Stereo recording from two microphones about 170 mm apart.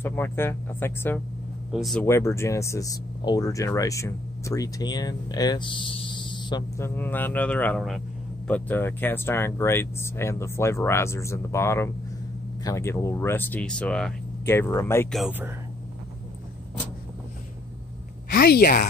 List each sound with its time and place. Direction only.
0.0 s speech: 15° left (ahead or behind)
1.7 s speech: centre (ahead or behind)
2.0 s speech: 15° left (ahead or behind)
6.8 s speech: 10° left (ahead or behind)
15.0 s speech: centre (ahead or behind)
18.3 s a woman's voice: 60° left (ahead or behind)